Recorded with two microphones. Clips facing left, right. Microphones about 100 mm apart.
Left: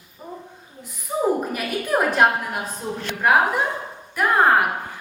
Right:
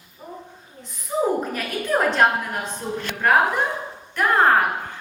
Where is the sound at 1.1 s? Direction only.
5° left (ahead or behind).